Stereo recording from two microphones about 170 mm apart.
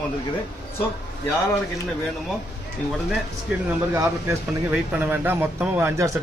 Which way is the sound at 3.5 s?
15° right (ahead or behind).